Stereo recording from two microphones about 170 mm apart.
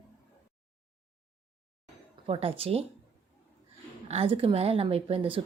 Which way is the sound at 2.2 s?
35° right (ahead or behind).